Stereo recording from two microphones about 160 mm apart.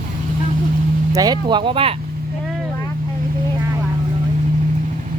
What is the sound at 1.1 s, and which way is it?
Speech, 25° right (ahead or behind).